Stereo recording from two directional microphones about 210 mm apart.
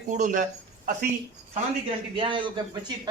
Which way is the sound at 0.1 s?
40° right (ahead or behind).